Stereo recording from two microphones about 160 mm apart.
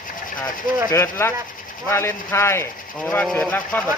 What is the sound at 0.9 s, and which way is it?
Speech, 15° left (ahead or behind).